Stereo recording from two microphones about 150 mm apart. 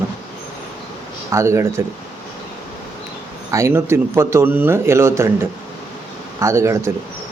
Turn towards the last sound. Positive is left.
turn(degrees=-20)  # may be behind; listen again after turning